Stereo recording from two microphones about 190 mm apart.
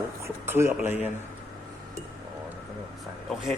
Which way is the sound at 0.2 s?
15° right (ahead or behind).